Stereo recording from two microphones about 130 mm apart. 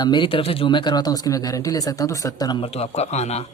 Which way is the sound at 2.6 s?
55° left (ahead or behind).